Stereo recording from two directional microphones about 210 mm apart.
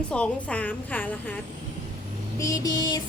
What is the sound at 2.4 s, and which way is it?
Speech, 15° left (ahead or behind).